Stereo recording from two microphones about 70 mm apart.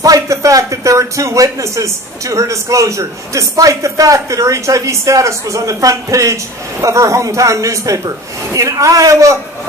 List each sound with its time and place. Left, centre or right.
0.0 s a man's voice: right